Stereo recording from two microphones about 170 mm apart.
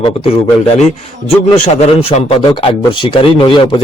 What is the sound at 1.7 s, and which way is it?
Speech, 35° left (ahead or behind).